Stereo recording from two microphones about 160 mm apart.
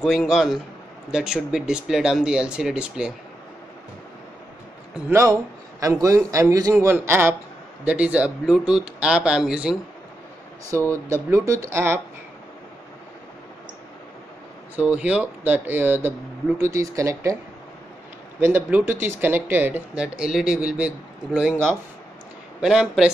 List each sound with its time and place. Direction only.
0.0 s speech: centre (ahead or behind)
5.1 s a man's voice: 20° right (ahead or behind)
10.9 s speech: 15° right (ahead or behind)
14.8 s a man's voice: 10° right (ahead or behind)
18.4 s speech: 15° right (ahead or behind)